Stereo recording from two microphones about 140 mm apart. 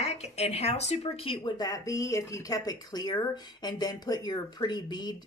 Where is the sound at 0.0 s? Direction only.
50° left (ahead or behind).